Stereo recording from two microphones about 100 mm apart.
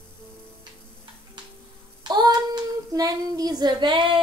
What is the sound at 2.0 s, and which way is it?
Child singing, 45° right (ahead or behind).